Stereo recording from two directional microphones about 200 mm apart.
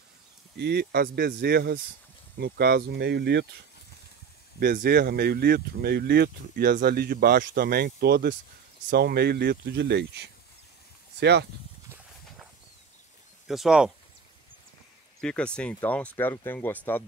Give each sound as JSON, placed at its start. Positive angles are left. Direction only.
{"t": 0.6, "sound": "speech", "side_deg": -55}
{"t": 4.6, "sound": "speech", "side_deg": -50}
{"t": 13.5, "sound": "speech", "side_deg": -5}
{"t": 15.1, "sound": "speech", "side_deg": 5}